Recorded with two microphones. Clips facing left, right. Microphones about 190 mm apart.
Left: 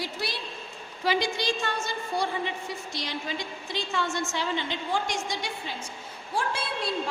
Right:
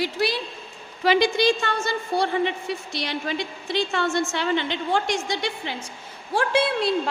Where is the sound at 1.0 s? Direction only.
75° right (ahead or behind).